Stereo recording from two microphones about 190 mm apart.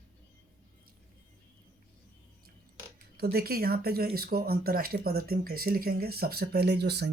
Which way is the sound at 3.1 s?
55° right (ahead or behind).